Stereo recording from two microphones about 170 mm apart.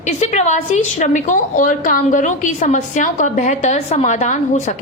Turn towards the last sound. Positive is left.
turn(degrees=45)  # may be behind; listen again after turning